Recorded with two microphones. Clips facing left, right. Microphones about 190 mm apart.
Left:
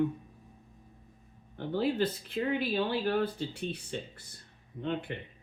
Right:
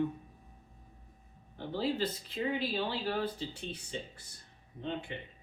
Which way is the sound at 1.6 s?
60° left (ahead or behind).